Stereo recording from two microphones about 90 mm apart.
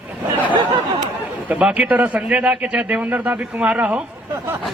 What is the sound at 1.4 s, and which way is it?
A man's voice, 15° right (ahead or behind).